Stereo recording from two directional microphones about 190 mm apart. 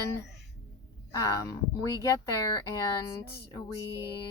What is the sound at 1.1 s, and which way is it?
Speech, 15° left (ahead or behind).